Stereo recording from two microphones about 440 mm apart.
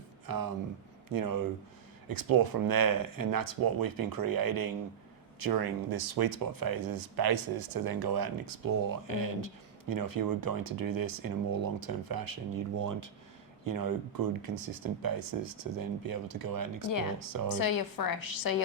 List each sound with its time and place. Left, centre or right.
0.3 s speech: right
17.5 s a woman's voice: left